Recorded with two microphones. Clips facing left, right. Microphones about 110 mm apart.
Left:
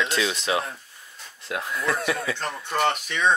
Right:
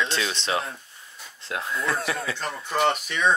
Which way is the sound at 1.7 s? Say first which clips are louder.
Left 1 dB; 30° right (ahead or behind).